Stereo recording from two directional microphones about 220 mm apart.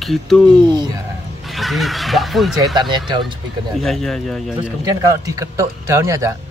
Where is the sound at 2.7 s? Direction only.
20° right (ahead or behind).